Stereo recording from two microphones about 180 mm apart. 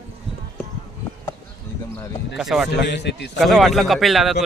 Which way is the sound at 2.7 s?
70° left (ahead or behind).